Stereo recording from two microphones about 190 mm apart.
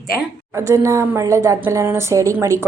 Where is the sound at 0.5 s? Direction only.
15° right (ahead or behind).